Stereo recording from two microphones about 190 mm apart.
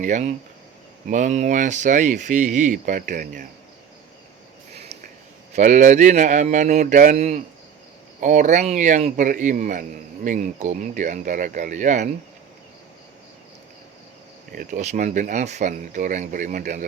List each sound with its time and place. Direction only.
0.0 s speech: 40° right (ahead or behind)
5.5 s speech: 40° right (ahead or behind)
14.5 s speech: 45° right (ahead or behind)